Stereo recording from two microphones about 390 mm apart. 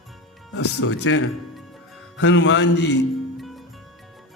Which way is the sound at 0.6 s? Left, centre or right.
Left.